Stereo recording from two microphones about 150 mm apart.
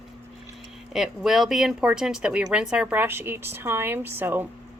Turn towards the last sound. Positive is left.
turn(degrees=-15)  # may be behind; listen again after turning